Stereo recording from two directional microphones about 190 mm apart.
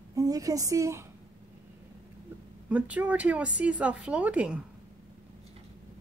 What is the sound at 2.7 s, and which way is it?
A woman's voice, 5° right (ahead or behind).